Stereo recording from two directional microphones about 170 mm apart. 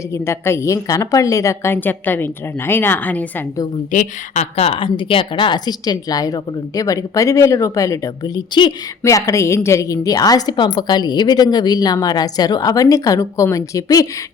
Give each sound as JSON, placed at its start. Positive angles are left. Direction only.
{"t": 0.1, "sound": "a woman's voice", "side_deg": 15}
{"t": 3.9, "sound": "a woman's voice", "side_deg": 45}